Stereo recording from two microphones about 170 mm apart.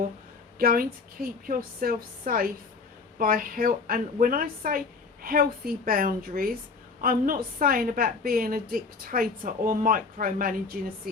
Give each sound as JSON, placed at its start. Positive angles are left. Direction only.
{"t": 0.6, "sound": "a woman's voice", "side_deg": -60}